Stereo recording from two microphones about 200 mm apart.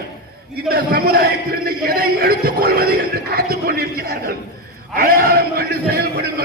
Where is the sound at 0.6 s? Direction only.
50° right (ahead or behind).